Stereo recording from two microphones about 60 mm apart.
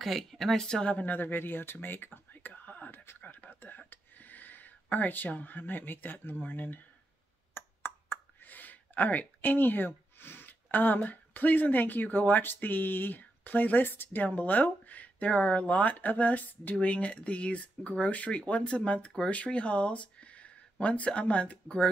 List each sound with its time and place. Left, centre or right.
0.0 s speech: centre
0.9 s speech: left
3.2 s a sound: left
7.5 s speech: left; by 21.9 s centre